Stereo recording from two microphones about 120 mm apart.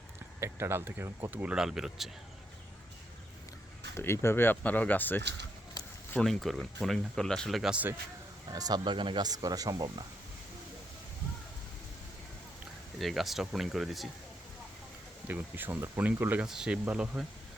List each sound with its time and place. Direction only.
0.3 s speech: 20° right (ahead or behind); by 2.0 s 5° right (ahead or behind)
3.9 s speech: 20° left (ahead or behind)
5.8 s a sound: 30° left (ahead or behind)
6.1 s speech: centre (ahead or behind)
8.4 s speech: 30° right (ahead or behind)
13.0 s speech: centre (ahead or behind)
15.3 s speech: 15° right (ahead or behind)
16.5 s speech: 5° right (ahead or behind)